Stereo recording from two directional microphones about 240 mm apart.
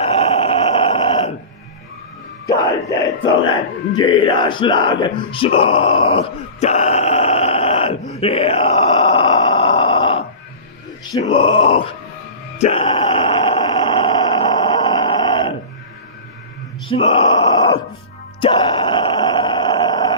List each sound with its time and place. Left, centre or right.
0.0 s grunt: left
2.4 s a sound: centre
11.1 s speech: left
12.5 s groan: left
16.8 s groan: left